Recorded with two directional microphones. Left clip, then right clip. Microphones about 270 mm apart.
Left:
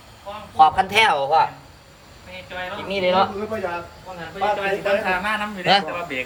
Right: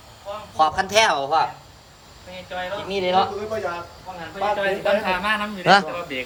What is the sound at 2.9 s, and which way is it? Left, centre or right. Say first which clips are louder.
Speech: left 2 dB; centre.